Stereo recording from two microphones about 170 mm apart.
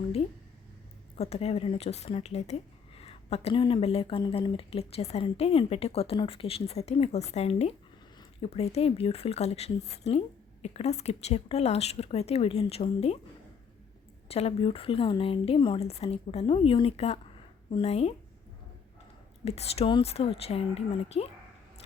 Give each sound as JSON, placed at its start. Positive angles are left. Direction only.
{"t": 1.1, "sound": "speech", "side_deg": 35}
{"t": 14.3, "sound": "speech", "side_deg": 35}
{"t": 19.5, "sound": "speech", "side_deg": 35}